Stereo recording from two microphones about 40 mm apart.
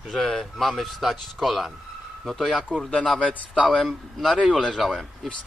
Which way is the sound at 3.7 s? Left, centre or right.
Centre.